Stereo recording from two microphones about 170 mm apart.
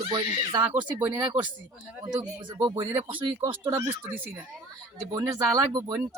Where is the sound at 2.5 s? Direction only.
25° right (ahead or behind).